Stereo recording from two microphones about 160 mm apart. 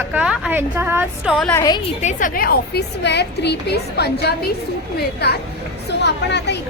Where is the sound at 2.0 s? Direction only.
50° left (ahead or behind).